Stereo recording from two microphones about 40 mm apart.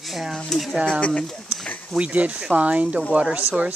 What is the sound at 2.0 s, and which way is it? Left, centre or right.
Speech, right.